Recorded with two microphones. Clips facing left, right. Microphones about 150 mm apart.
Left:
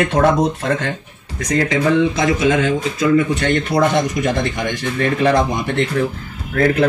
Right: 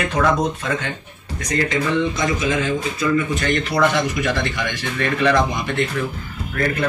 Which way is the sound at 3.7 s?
45° left (ahead or behind).